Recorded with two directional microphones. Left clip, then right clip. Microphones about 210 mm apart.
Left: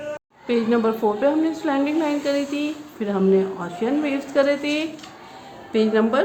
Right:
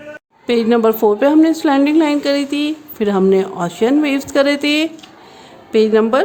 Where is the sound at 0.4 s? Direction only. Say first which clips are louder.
Right 7 dB; 50° right (ahead or behind).